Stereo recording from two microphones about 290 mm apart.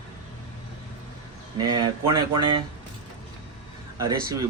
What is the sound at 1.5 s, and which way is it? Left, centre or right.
Speech, centre.